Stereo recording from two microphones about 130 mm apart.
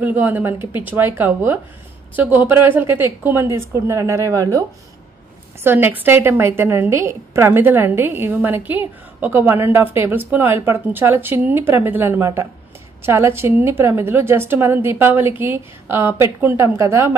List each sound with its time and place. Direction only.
0.0 s a woman's voice: 15° right (ahead or behind)